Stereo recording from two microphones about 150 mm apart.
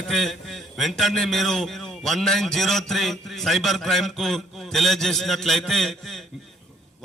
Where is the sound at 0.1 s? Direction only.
Centre (ahead or behind).